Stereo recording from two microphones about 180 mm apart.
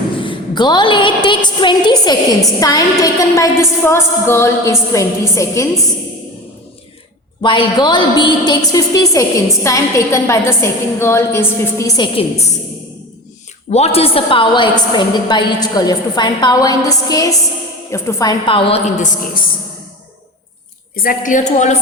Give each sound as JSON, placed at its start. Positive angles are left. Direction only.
{"t": 0.2, "sound": "a woman's voice", "side_deg": 25}
{"t": 2.6, "sound": "music", "side_deg": 20}
{"t": 7.4, "sound": "a woman's voice", "side_deg": 25}
{"t": 9.6, "sound": "music", "side_deg": 15}
{"t": 13.7, "sound": "a woman's voice", "side_deg": 35}
{"t": 18.9, "sound": "a woman's voice", "side_deg": 50}
{"t": 20.9, "sound": "a woman's voice", "side_deg": 50}